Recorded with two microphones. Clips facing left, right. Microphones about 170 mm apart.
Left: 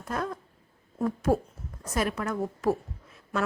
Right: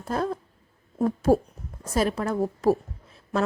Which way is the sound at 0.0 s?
30° right (ahead or behind).